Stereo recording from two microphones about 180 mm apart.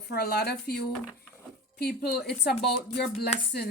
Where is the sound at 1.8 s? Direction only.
60° left (ahead or behind).